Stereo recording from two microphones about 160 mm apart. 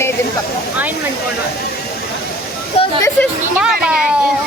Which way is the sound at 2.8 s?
40° left (ahead or behind).